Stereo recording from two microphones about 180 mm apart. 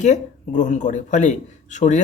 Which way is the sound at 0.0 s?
45° left (ahead or behind).